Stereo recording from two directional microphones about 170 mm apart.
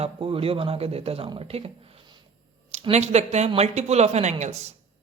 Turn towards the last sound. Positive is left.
turn(degrees=-40)  # may be behind; listen again after turning